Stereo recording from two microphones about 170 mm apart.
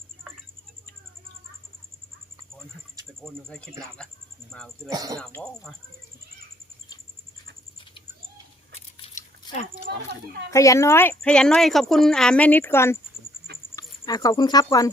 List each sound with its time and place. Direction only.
3.2 s speech: 5° left (ahead or behind)
4.9 s speech: 20° right (ahead or behind)
5.1 s speech: 5° left (ahead or behind)
9.0 s a sound: 35° left (ahead or behind)
10.5 s speech: 20° left (ahead or behind)
14.0 s speech: 20° left (ahead or behind)